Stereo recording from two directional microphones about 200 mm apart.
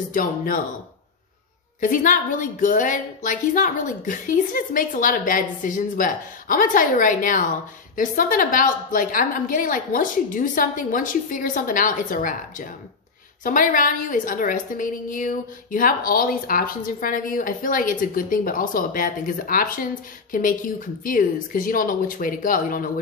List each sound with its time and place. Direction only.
0.1 s a woman's voice: 45° left (ahead or behind)
1.8 s a woman's voice: 40° left (ahead or behind)